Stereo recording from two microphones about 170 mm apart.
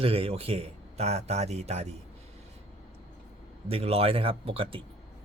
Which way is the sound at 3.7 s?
35° right (ahead or behind).